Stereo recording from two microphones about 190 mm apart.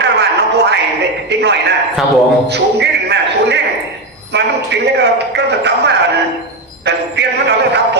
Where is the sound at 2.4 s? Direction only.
60° right (ahead or behind).